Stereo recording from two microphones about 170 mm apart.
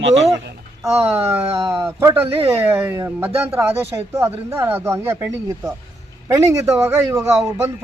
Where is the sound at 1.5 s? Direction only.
30° right (ahead or behind).